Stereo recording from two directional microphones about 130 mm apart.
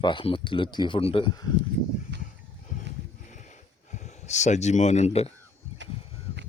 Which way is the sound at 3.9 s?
60° left (ahead or behind).